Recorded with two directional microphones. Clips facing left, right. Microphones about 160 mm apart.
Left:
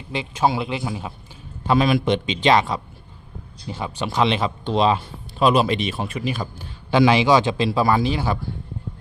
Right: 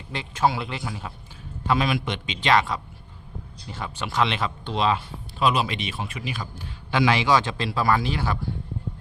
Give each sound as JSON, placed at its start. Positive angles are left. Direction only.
{"t": 0.1, "sound": "a man's voice", "side_deg": 10}
{"t": 1.6, "sound": "speech", "side_deg": 35}
{"t": 6.9, "sound": "speech", "side_deg": 25}